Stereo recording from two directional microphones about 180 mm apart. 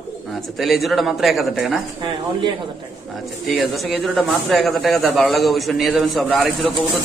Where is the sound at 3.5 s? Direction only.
Centre (ahead or behind).